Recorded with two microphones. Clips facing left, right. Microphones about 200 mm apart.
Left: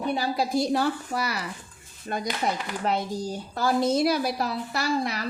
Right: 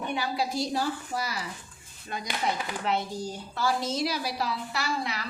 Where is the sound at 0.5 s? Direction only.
60° left (ahead or behind).